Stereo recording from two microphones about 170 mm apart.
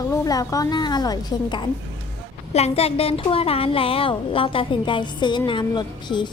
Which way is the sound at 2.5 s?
35° left (ahead or behind).